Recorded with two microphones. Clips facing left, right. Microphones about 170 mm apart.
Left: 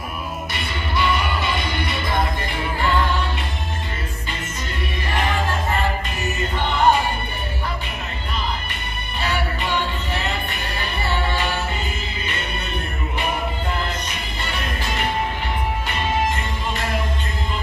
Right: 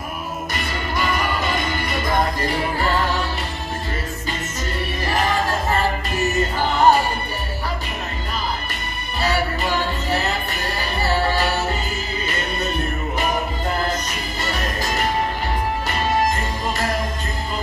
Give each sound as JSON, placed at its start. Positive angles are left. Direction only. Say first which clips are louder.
{"t": 0.5, "sound": "music", "louder": "right 2 dB", "side_deg": -45}
{"t": 5.0, "sound": "music", "louder": "right 2 dB", "side_deg": -40}
{"t": 9.2, "sound": "music", "louder": "right 3 dB", "side_deg": -40}
{"t": 14.4, "sound": "music", "louder": "right 3 dB", "side_deg": -40}